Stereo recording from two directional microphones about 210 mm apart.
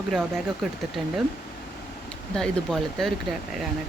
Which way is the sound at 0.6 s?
Centre (ahead or behind).